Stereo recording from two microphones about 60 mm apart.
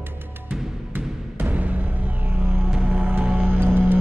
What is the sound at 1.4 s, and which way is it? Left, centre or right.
Music, right.